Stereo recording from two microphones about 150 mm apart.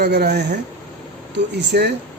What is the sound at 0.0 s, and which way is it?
Speech, 90° right.